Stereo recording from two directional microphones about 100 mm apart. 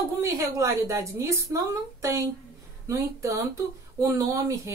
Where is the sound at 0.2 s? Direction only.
30° right (ahead or behind).